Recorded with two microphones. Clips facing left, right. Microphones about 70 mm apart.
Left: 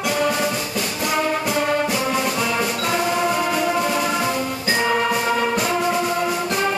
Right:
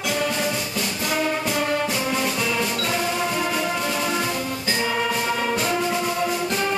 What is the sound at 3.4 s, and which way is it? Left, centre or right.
Music, centre.